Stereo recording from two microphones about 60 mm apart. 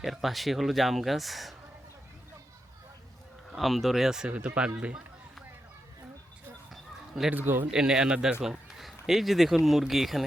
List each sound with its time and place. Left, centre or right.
0.0 s speech: centre
3.5 s speech: centre
4.3 s speech: centre
7.3 s speech: right
7.7 s speech: centre